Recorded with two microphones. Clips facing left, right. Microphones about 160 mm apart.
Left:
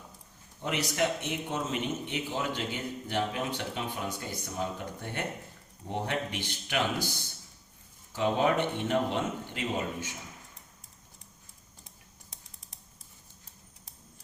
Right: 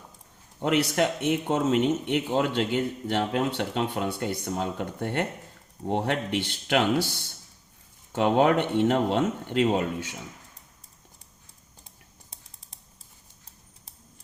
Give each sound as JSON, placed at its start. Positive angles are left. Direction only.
{"t": 0.6, "sound": "speech", "side_deg": -65}
{"t": 8.1, "sound": "speech", "side_deg": -65}